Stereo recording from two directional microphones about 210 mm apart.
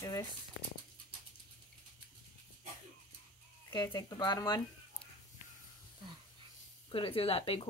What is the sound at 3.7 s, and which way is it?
Speech, 20° left (ahead or behind).